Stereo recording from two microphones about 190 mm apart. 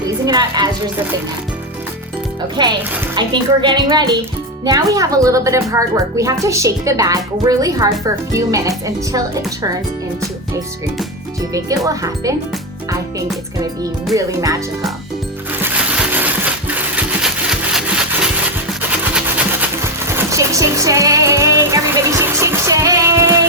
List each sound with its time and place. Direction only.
0.3 s a child's voice: 20° right (ahead or behind)
2.6 s a child's voice: 25° right (ahead or behind)
11.5 s speech: 20° right (ahead or behind)
15.6 s a sound: 5° right (ahead or behind)
18.8 s music: 10° right (ahead or behind)